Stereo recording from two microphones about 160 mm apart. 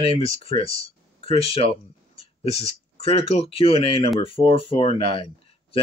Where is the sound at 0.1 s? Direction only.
40° left (ahead or behind).